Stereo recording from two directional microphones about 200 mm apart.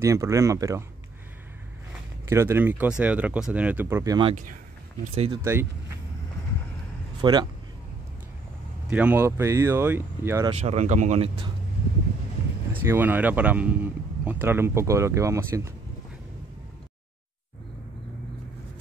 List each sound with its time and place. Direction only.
0.0 s speech: 15° right (ahead or behind)
2.2 s speech: 15° right (ahead or behind)
5.0 s speech: 30° right (ahead or behind)
5.3 s speech: 10° right (ahead or behind)
7.2 s speech: 20° right (ahead or behind)
8.8 s speech: 5° right (ahead or behind)
10.5 s speech: 35° right (ahead or behind)
12.8 s speech: 10° right (ahead or behind)